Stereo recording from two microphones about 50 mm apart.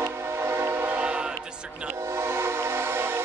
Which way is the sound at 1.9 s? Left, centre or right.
Right.